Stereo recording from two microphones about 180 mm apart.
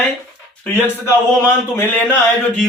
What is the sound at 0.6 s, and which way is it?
A man's voice, 15° left (ahead or behind).